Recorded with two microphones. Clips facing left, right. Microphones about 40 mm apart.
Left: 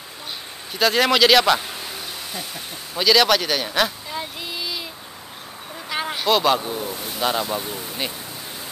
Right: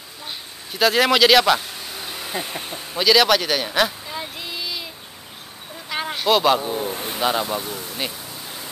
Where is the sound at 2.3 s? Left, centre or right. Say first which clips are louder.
Right 4 dB; right.